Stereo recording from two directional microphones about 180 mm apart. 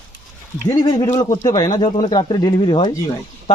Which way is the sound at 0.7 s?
20° left (ahead or behind).